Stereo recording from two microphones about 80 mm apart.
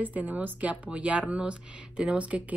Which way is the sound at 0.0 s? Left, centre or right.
Right.